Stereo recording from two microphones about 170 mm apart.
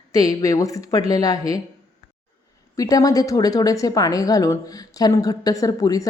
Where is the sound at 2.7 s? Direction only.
20° left (ahead or behind).